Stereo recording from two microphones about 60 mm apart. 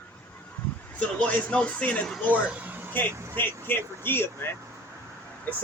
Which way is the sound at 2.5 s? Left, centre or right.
Right.